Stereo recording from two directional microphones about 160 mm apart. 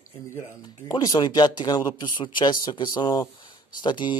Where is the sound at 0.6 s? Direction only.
25° left (ahead or behind).